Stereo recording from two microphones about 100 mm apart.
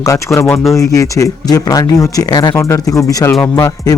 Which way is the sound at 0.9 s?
35° left (ahead or behind).